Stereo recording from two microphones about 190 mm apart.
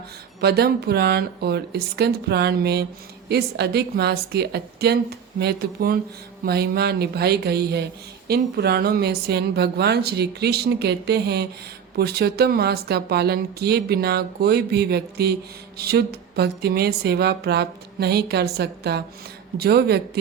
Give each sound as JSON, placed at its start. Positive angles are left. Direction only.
{"t": 0.4, "sound": "speech", "side_deg": -55}